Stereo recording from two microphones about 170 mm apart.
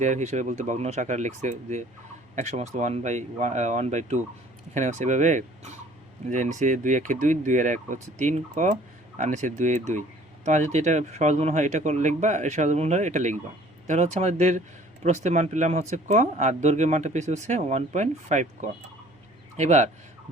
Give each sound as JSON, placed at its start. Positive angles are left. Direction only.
{"t": 0.0, "sound": "speech", "side_deg": -45}